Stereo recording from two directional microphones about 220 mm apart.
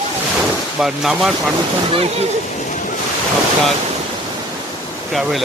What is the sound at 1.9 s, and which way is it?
Speech, 25° right (ahead or behind).